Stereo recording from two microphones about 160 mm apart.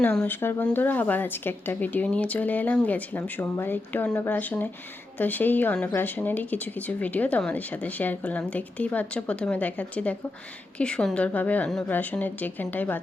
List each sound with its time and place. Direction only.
0.0 s speech: 10° left (ahead or behind)